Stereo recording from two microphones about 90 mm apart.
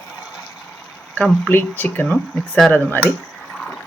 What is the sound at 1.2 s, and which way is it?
Speech, 15° left (ahead or behind).